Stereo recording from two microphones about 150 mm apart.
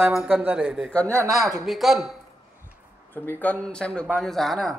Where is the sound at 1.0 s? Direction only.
20° right (ahead or behind).